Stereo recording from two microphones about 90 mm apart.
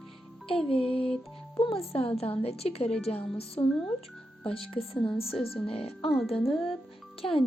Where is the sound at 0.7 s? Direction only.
90° left.